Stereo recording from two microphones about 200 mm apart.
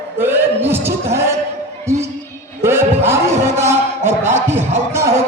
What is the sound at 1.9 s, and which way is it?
Music, 15° right (ahead or behind).